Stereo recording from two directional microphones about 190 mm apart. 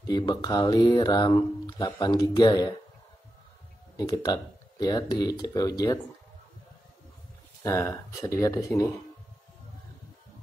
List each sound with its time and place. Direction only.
0.0 s speech: 20° left (ahead or behind)
3.9 s speech: 20° left (ahead or behind)
7.6 s speech: 15° left (ahead or behind)